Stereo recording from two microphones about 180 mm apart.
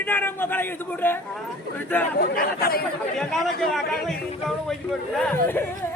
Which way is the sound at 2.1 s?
55° left (ahead or behind).